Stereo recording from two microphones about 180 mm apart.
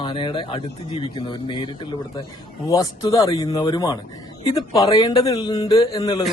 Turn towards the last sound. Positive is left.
turn(degrees=20)  # may be behind; listen again after turning